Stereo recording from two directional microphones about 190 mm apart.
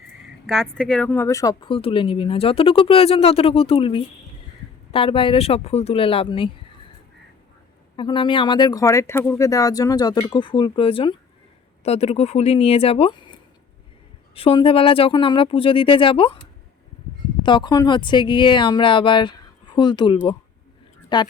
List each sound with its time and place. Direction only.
0.4 s a woman's voice: centre (ahead or behind); by 6.5 s 25° left (ahead or behind)
7.9 s a woman's voice: 25° left (ahead or behind)
14.3 s a woman's voice: 30° left (ahead or behind)
17.4 s a woman's voice: 25° left (ahead or behind)